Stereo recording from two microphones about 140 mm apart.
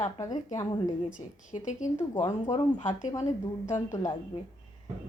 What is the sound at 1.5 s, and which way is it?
Speech, 65° left (ahead or behind).